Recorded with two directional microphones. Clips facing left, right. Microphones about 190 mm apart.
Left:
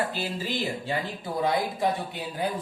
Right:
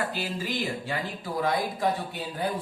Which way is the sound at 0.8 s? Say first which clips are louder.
Left 2 dB; 25° left (ahead or behind).